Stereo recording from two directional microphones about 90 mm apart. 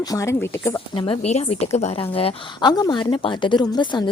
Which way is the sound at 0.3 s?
30° left (ahead or behind).